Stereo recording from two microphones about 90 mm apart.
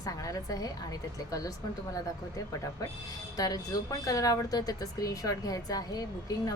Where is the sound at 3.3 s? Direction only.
45° left (ahead or behind).